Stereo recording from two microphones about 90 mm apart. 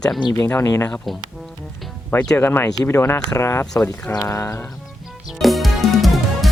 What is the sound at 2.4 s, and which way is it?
Speech, 25° left (ahead or behind).